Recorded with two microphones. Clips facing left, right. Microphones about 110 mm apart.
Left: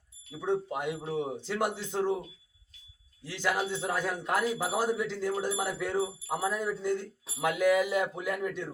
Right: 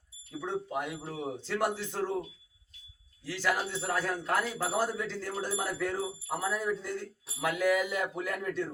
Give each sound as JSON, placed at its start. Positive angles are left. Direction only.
{"t": 0.3, "sound": "speech", "side_deg": 20}
{"t": 3.2, "sound": "a man's voice", "side_deg": 20}